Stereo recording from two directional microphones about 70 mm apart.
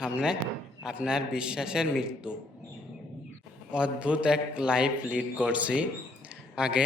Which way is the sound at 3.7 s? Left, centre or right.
Centre.